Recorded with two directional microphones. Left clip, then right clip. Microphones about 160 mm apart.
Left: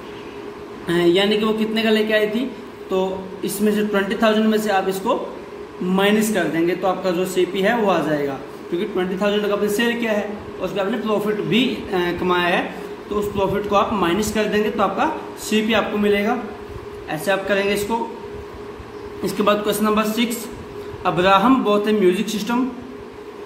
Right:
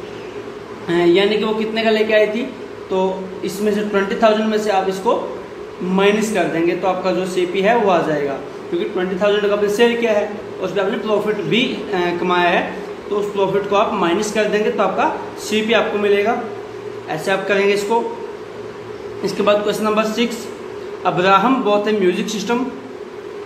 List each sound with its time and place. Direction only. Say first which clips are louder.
0.8 s a woman's voice: right 3 dB; 40° left (ahead or behind)
19.2 s speech: right 3 dB; 35° left (ahead or behind)